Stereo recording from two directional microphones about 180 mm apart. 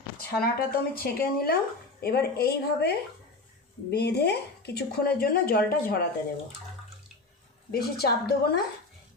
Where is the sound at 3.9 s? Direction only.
65° left (ahead or behind).